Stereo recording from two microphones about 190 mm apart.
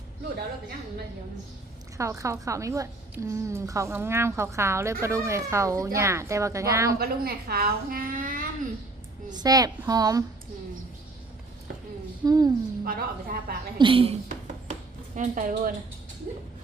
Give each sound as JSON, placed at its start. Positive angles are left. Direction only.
{"t": 2.0, "sound": "a woman's voice", "side_deg": -15}
{"t": 7.0, "sound": "a woman's voice", "side_deg": -55}
{"t": 9.3, "sound": "a woman's voice", "side_deg": -20}
{"t": 12.2, "sound": "a woman's voice", "side_deg": -20}
{"t": 12.8, "sound": "a woman's voice", "side_deg": -50}
{"t": 13.7, "sound": "a woman's voice", "side_deg": -25}
{"t": 14.3, "sound": "dishes", "side_deg": -40}